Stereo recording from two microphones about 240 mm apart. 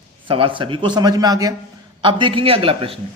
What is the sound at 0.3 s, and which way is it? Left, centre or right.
A man's voice, right.